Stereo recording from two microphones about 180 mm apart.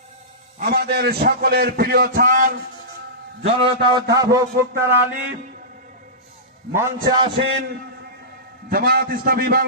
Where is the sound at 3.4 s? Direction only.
30° right (ahead or behind).